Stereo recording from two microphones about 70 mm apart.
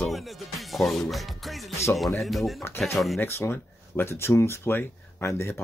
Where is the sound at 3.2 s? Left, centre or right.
Left.